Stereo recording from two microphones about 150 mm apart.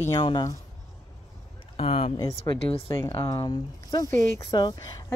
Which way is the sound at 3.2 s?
25° left (ahead or behind).